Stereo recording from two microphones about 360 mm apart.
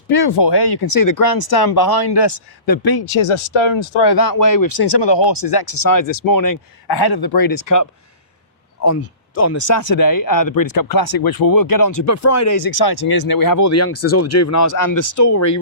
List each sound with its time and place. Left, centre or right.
0.1 s speech: left
4.0 s speech: left
8.8 s speech: left